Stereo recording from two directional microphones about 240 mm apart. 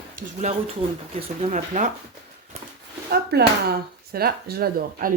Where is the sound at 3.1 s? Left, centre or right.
Right.